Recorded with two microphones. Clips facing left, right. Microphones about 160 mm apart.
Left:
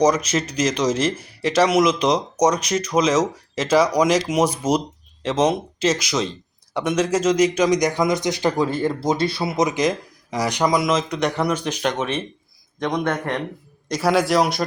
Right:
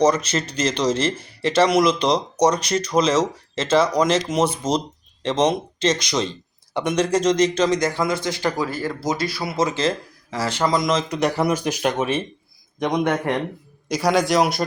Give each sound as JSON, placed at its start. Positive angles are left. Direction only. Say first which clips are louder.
{"t": 0.8, "sound": "a man's voice", "louder": "even", "side_deg": 10}
{"t": 13.8, "sound": "speech", "louder": "even", "side_deg": 0}